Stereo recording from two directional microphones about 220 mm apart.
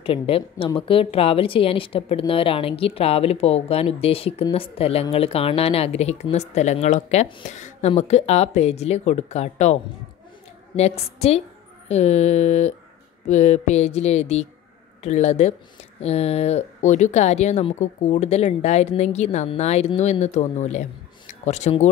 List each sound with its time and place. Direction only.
0.0 s a woman's voice: 25° left (ahead or behind)
10.8 s a woman's voice: 25° left (ahead or behind)